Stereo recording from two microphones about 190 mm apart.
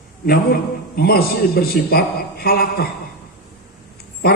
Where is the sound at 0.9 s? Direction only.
55° left (ahead or behind).